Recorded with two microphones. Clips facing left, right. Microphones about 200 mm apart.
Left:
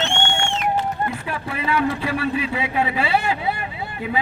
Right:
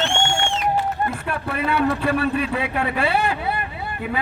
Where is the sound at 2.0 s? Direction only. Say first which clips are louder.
Right 2 dB; 55° right (ahead or behind).